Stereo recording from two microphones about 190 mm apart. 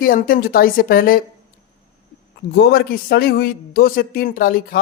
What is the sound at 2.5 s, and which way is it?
A man's voice, 55° left (ahead or behind).